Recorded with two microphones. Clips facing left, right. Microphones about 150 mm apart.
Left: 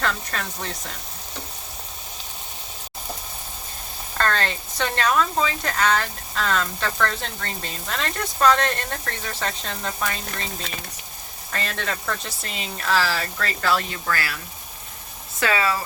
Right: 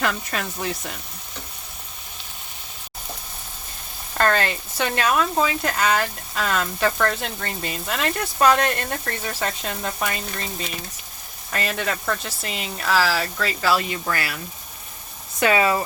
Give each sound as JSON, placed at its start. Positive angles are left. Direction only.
{"t": 0.0, "sound": "speech", "side_deg": -10}
{"t": 4.2, "sound": "speech", "side_deg": -10}
{"t": 11.5, "sound": "speech", "side_deg": -10}
{"t": 15.4, "sound": "speech", "side_deg": -20}